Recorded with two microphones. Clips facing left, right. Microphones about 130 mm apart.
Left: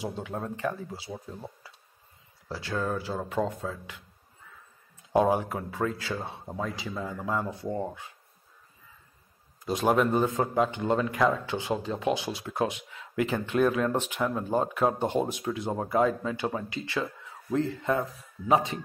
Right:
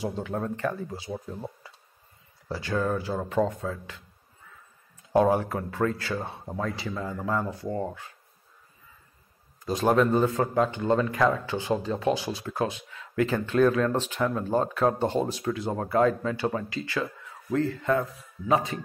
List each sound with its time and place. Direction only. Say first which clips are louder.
0.2 s speech: right 2 dB; 5° left (ahead or behind)
2.4 s speech: right 3 dB; centre (ahead or behind)
5.1 s speech: right 2 dB; 15° left (ahead or behind)
9.8 s speech: right 2 dB; 15° left (ahead or behind)
12.3 s speech: even; 15° left (ahead or behind)
16.6 s speech: right 1 dB; 20° left (ahead or behind)